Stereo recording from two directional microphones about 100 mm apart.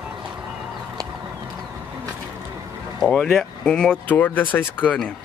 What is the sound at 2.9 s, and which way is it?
A man's voice, 5° left (ahead or behind).